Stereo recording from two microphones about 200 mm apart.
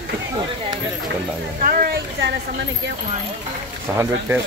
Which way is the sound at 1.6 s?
45° right (ahead or behind).